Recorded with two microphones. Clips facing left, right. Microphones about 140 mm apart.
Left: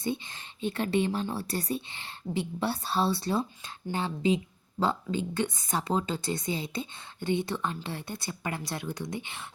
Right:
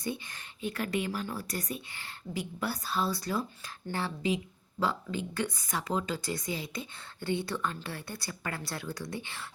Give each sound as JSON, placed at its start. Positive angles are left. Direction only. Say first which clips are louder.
{"t": 0.0, "sound": "speech", "louder": "left 4 dB", "side_deg": 25}